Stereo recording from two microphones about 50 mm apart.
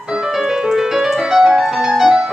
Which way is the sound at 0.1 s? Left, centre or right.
Centre.